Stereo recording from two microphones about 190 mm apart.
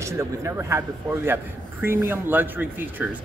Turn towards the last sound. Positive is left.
turn(degrees=-10)  # may be behind; listen again after turning